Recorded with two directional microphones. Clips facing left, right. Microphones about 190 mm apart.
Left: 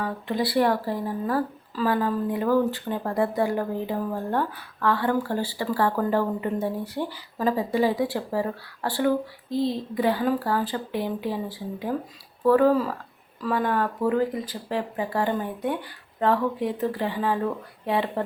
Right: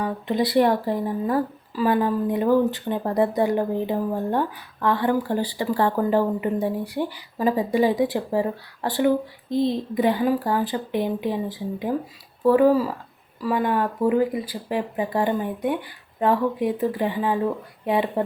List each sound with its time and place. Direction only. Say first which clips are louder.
0.0 s speech: right 3 dB; 20° right (ahead or behind)